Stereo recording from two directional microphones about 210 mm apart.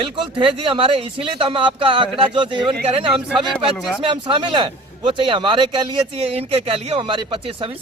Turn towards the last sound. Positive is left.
turn(degrees=-25)  # may be behind; listen again after turning